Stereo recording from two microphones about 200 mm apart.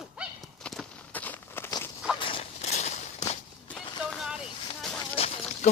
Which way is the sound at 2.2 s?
30° left (ahead or behind).